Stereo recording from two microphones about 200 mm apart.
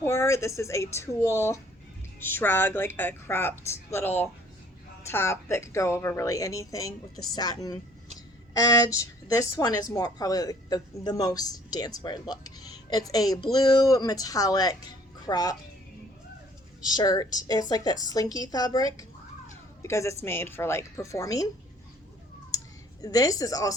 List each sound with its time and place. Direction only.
0.0 s a woman's voice: 15° left (ahead or behind)
16.9 s a woman's voice: 20° left (ahead or behind)
22.5 s speech: 15° left (ahead or behind)